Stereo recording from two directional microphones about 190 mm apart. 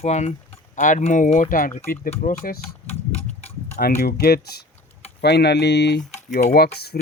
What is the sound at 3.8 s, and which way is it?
Speech, 55° left (ahead or behind).